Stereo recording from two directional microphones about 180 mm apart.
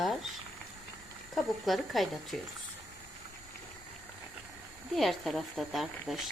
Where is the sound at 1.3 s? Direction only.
Centre (ahead or behind).